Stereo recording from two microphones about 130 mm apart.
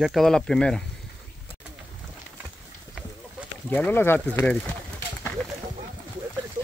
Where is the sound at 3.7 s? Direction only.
15° left (ahead or behind).